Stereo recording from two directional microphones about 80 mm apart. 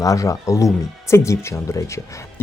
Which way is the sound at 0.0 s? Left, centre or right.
Left.